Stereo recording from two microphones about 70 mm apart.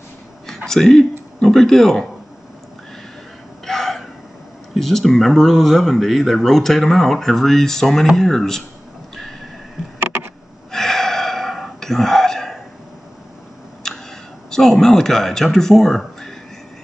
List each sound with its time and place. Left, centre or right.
0.7 s speech: centre
3.6 s hiccup: centre
4.7 s speech: centre
9.9 s a sound: right
10.7 s gasp: centre
13.9 s a sound: centre
14.5 s speech: centre